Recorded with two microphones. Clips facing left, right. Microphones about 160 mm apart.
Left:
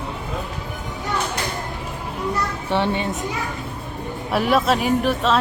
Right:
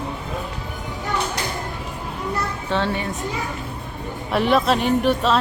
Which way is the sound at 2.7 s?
20° left (ahead or behind).